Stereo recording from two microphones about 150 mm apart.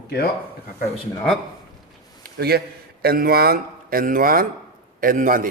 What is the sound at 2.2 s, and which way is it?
A man's voice, 90° right.